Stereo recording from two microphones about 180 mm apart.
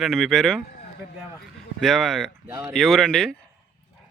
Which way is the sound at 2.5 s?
15° right (ahead or behind).